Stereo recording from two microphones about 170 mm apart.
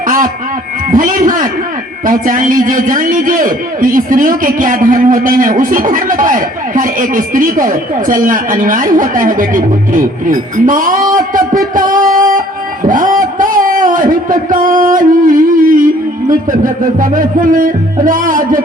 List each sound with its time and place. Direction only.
0.9 s a man's voice: 50° right (ahead or behind)
12.0 s music: 50° right (ahead or behind)
12.8 s a sound: 50° right (ahead or behind)
14.5 s music: 55° right (ahead or behind)
16.3 s a man's voice: 50° right (ahead or behind)